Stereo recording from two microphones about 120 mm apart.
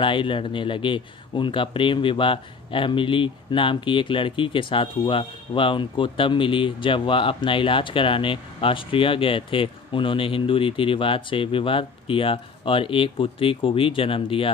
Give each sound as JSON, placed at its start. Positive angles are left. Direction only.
{"t": 0.0, "sound": "speech", "side_deg": 45}